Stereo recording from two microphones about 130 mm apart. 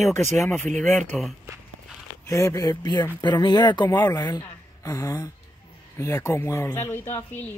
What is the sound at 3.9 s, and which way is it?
Speech, 15° left (ahead or behind).